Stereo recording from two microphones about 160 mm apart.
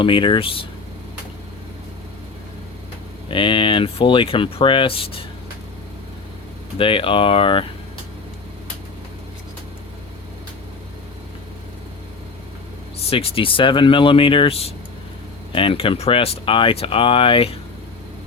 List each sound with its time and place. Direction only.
0.0 s speech: 30° left (ahead or behind)
3.2 s speech: 30° left (ahead or behind)
6.7 s speech: 35° left (ahead or behind)
13.0 s speech: 35° left (ahead or behind)